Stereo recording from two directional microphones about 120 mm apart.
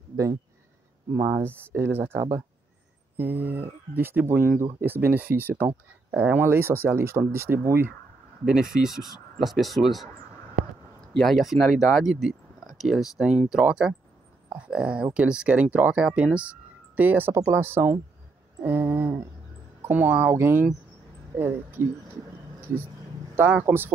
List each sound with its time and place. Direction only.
1.1 s speech: 25° right (ahead or behind)
8.5 s speech: 5° right (ahead or behind)
11.1 s speech: centre (ahead or behind); by 17.3 s 15° right (ahead or behind)
17.3 s speech: 25° right (ahead or behind)
23.3 s speech: 15° right (ahead or behind)